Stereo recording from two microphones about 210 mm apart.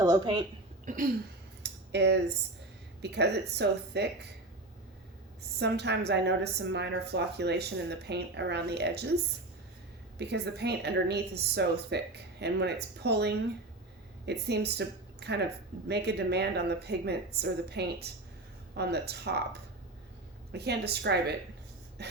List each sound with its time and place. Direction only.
0.0 s speech: 20° right (ahead or behind)
1.9 s a woman's voice: 55° right (ahead or behind)
5.5 s a woman's voice: 55° right (ahead or behind)
10.2 s a woman's voice: 55° right (ahead or behind)
20.5 s a woman's voice: 50° right (ahead or behind)